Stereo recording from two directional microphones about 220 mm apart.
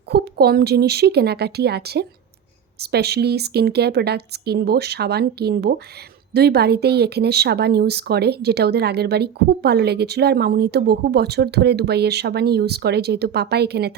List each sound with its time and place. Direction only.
0.1 s speech: 45° right (ahead or behind)